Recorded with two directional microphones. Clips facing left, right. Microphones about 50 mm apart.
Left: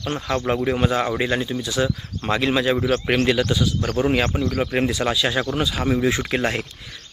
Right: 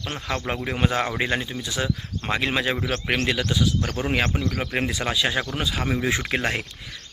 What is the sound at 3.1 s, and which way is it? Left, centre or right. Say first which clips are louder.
Speech: left 3 dB; centre.